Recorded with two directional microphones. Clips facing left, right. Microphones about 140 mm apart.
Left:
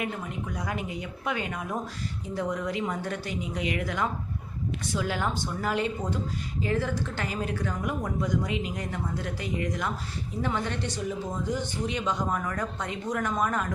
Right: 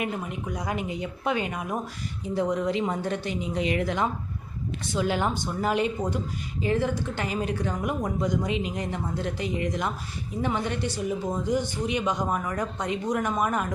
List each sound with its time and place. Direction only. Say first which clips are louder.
0.0 s speech: right 2 dB; 20° right (ahead or behind)